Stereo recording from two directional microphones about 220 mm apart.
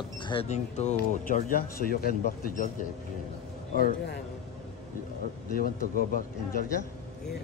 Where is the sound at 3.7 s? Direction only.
45° left (ahead or behind).